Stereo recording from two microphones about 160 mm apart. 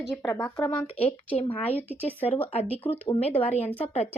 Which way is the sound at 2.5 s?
40° left (ahead or behind).